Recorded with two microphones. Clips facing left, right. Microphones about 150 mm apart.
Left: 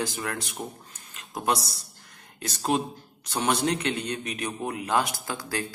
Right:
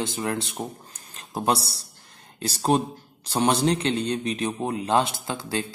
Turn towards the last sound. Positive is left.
turn(degrees=-25)  # may be behind; listen again after turning